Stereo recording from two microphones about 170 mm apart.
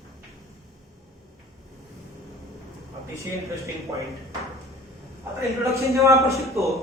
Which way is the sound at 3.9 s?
20° right (ahead or behind).